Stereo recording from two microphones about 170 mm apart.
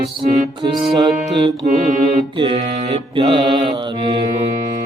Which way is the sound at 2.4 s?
30° right (ahead or behind).